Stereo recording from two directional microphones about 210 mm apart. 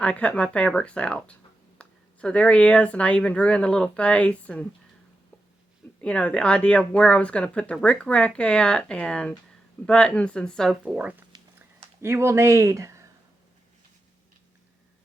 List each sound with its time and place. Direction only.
0.0 s speech: 5° left (ahead or behind)
6.0 s speech: 5° left (ahead or behind); by 13.1 s 15° right (ahead or behind)